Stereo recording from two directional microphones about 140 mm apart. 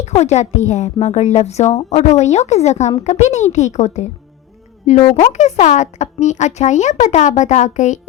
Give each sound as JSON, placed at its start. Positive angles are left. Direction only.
{"t": 0.0, "sound": "a woman's voice", "side_deg": 55}
{"t": 5.3, "sound": "speech", "side_deg": 55}